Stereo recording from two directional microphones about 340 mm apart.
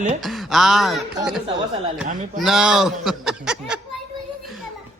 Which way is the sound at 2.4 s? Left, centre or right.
Centre.